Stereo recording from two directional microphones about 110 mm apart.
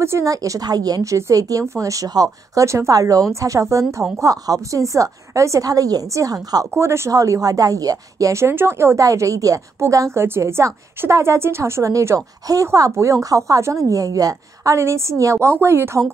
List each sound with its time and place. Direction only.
0.0 s a woman's voice: 25° right (ahead or behind)